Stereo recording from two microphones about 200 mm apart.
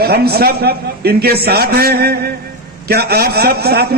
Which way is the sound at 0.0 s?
50° right (ahead or behind).